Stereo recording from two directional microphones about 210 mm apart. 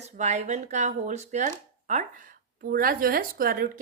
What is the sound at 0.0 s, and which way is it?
Speech, 35° right (ahead or behind).